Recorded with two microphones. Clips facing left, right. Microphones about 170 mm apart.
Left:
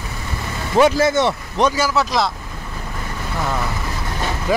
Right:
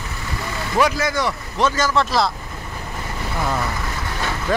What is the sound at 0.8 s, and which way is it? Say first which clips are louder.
Speech: left 6 dB; 25° left (ahead or behind).